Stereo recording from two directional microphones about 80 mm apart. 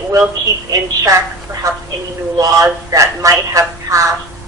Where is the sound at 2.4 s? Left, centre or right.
Right.